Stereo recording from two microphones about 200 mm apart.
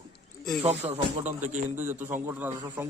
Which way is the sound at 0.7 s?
35° right (ahead or behind).